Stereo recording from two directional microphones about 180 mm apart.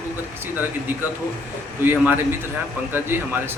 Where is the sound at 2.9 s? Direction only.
10° right (ahead or behind).